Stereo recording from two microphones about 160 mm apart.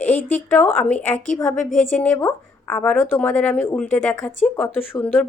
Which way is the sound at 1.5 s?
50° left (ahead or behind).